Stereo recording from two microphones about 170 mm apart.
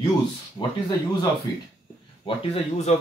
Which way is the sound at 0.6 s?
15° left (ahead or behind).